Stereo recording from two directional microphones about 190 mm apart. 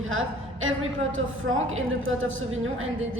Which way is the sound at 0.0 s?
90° right.